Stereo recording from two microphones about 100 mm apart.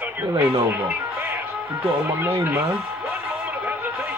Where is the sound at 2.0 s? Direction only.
25° right (ahead or behind).